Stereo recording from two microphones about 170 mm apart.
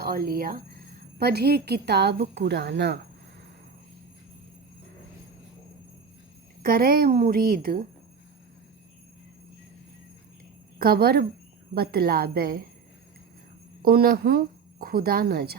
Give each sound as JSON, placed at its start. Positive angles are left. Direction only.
{"t": 0.0, "sound": "a woman's voice", "side_deg": -65}
{"t": 1.2, "sound": "a woman's voice", "side_deg": -70}
{"t": 6.6, "sound": "a woman's voice", "side_deg": -60}
{"t": 10.8, "sound": "a woman's voice", "side_deg": -60}
{"t": 13.8, "sound": "a woman's voice", "side_deg": -65}